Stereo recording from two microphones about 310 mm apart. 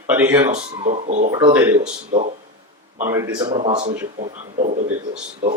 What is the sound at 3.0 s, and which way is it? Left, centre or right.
Speech, centre.